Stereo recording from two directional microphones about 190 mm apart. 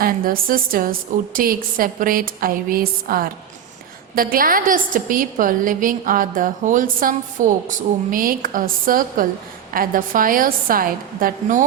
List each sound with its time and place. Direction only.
0.0 s a woman's voice: 50° right (ahead or behind)